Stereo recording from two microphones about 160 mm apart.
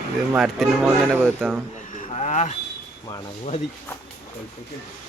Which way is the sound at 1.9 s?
50° left (ahead or behind).